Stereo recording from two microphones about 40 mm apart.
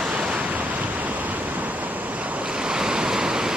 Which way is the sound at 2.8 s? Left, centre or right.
Centre.